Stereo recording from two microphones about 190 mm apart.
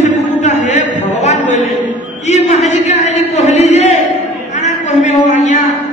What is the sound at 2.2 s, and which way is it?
Music, 35° left (ahead or behind).